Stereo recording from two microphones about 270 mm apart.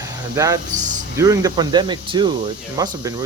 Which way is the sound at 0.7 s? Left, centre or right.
Right.